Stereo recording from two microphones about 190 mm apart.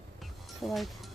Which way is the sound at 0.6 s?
Centre (ahead or behind).